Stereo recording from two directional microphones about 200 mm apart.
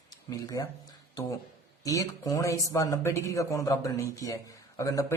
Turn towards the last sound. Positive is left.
turn(degrees=15)  # may be behind; listen again after turning